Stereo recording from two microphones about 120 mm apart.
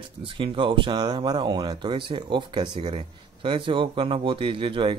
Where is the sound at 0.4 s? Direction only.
45° right (ahead or behind).